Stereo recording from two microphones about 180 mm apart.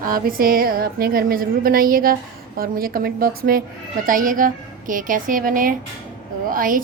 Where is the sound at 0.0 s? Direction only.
50° right (ahead or behind).